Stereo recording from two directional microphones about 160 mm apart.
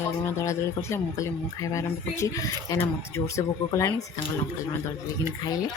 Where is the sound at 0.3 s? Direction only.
15° left (ahead or behind).